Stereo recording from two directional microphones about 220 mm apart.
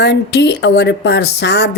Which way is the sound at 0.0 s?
50° left (ahead or behind).